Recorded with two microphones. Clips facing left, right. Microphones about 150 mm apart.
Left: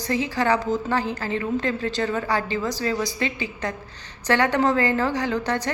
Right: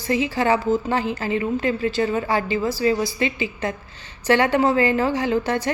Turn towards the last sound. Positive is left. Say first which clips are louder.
# right 3 dB
turn(degrees=-10)  # may be behind; listen again after turning